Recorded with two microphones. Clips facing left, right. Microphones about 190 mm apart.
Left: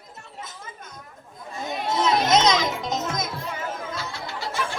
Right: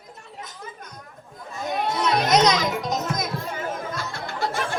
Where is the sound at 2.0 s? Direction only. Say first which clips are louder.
Even; 25° left (ahead or behind).